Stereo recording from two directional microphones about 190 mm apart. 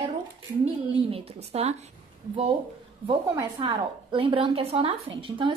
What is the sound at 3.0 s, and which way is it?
A woman's voice, 25° right (ahead or behind).